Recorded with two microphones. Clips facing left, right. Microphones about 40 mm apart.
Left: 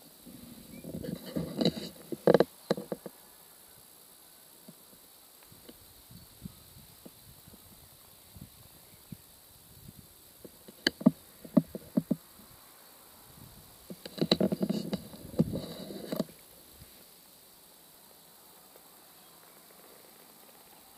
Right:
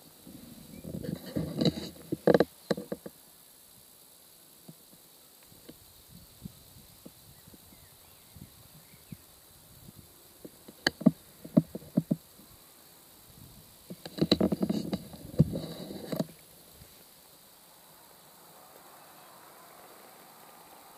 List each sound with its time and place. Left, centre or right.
1.0 s dog: centre
2.2 s insect: centre
10.8 s insect: centre
14.0 s a sound: centre
14.9 s bee: centre
18.0 s a sound: centre